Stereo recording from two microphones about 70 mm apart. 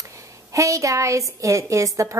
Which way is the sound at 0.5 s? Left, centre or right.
Right.